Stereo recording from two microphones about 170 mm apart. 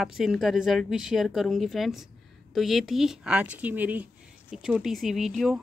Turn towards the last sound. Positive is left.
turn(degrees=0)  # may be behind; listen again after turning